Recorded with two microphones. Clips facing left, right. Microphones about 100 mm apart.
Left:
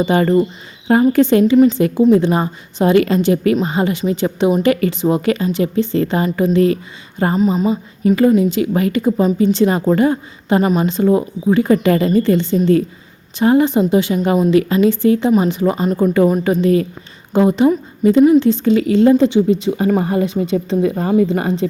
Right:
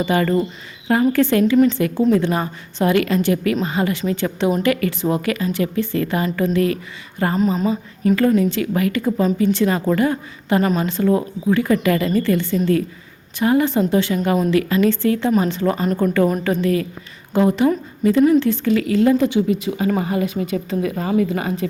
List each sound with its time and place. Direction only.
0.0 s a woman's voice: 25° left (ahead or behind)
7.3 s speech: centre (ahead or behind)
8.4 s a woman's voice: 20° left (ahead or behind)